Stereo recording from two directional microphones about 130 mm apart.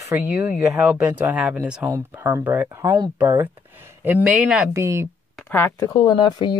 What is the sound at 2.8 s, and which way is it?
Speech, 30° right (ahead or behind).